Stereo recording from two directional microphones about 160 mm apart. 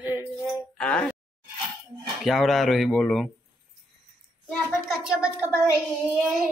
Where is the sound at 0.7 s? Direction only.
5° left (ahead or behind).